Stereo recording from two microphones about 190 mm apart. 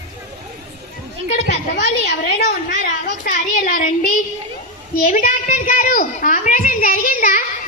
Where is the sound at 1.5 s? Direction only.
55° left (ahead or behind).